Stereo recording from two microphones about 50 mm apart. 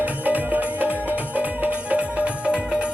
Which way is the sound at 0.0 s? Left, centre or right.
Right.